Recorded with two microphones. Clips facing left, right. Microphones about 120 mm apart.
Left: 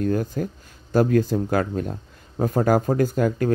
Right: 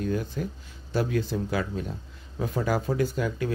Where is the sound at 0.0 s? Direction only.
45° left (ahead or behind).